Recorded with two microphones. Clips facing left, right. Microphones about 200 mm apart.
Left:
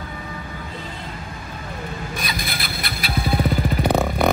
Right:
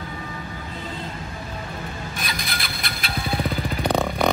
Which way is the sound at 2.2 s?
50° right (ahead or behind).